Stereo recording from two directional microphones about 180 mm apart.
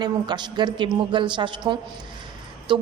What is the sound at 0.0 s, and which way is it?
A woman's voice, 25° right (ahead or behind).